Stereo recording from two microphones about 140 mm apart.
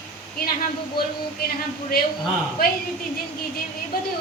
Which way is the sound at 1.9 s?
90° left.